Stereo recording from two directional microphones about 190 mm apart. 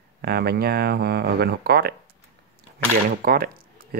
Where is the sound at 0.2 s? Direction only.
55° right (ahead or behind).